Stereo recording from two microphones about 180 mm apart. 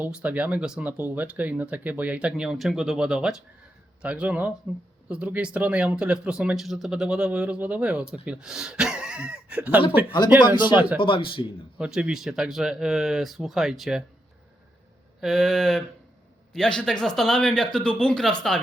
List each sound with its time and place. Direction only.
0.0 s speech: 5° right (ahead or behind)
10.1 s speech: 25° left (ahead or behind)
11.8 s speech: 5° right (ahead or behind)
15.2 s speech: centre (ahead or behind)